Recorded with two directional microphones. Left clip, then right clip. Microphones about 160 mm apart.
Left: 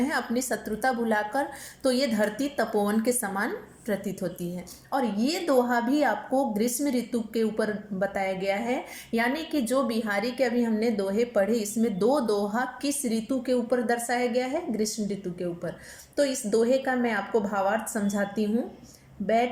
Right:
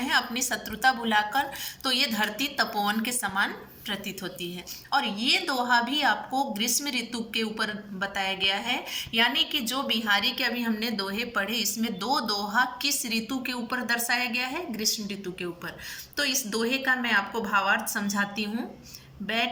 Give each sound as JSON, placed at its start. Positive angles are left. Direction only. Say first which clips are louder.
{"t": 0.0, "sound": "a woman's voice", "louder": "right 2 dB", "side_deg": 25}